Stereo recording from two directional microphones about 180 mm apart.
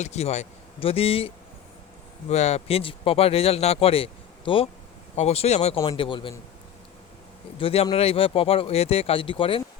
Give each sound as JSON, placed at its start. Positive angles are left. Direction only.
{"t": 0.0, "sound": "speech", "side_deg": 40}
{"t": 2.3, "sound": "speech", "side_deg": 40}
{"t": 5.8, "sound": "a man's voice", "side_deg": 25}
{"t": 7.6, "sound": "speech", "side_deg": 30}